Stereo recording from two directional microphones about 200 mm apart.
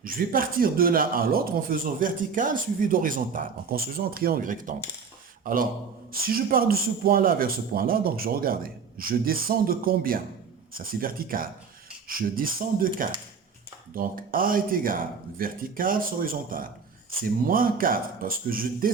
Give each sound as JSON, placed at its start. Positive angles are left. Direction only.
{"t": 0.0, "sound": "speech", "side_deg": -45}
{"t": 6.2, "sound": "speech", "side_deg": -45}